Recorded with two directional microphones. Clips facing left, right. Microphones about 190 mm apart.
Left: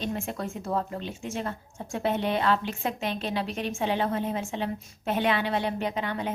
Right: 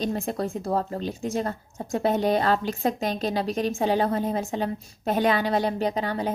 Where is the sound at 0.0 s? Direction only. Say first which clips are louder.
Right 5 dB; 35° right (ahead or behind).